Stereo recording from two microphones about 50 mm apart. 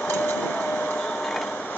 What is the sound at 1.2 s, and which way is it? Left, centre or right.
Printer, centre.